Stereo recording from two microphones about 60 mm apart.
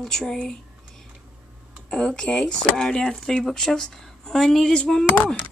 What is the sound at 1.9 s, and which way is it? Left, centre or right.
Speech, centre.